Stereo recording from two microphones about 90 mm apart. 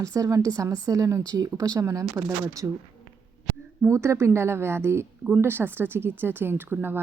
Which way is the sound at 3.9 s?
30° right (ahead or behind).